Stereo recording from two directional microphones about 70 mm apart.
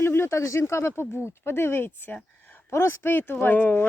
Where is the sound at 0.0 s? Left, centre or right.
Left.